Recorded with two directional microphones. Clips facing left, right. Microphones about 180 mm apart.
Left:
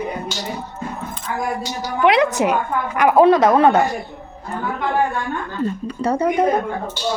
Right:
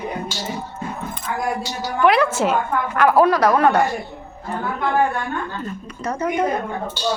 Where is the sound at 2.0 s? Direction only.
20° left (ahead or behind).